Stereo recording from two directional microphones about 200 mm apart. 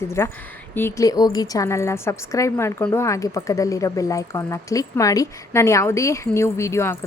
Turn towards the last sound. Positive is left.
turn(degrees=15)  # may be behind; listen again after turning